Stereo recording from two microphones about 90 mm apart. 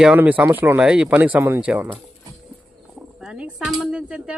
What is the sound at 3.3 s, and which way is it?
Speech, 10° right (ahead or behind).